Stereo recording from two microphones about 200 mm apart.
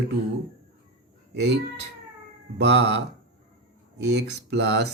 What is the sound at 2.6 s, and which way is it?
Speech, 60° right (ahead or behind).